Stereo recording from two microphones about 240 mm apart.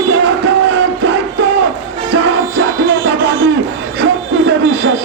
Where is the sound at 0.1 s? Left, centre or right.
Right.